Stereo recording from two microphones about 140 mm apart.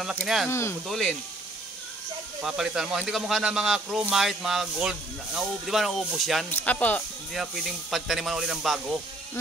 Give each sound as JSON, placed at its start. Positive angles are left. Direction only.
{"t": 0.5, "sound": "speech", "side_deg": 20}
{"t": 0.8, "sound": "speech", "side_deg": 5}
{"t": 2.4, "sound": "speech", "side_deg": -5}
{"t": 6.5, "sound": "speech", "side_deg": 10}
{"t": 7.3, "sound": "speech", "side_deg": 0}